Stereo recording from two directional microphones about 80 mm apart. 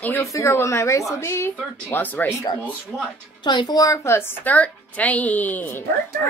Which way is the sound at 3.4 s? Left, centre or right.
Left.